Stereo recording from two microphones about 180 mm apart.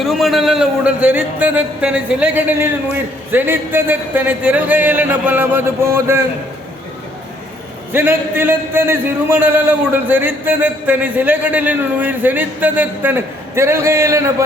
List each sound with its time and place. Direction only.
0.0 s a man's voice: centre (ahead or behind)
7.9 s a man's voice: 10° right (ahead or behind)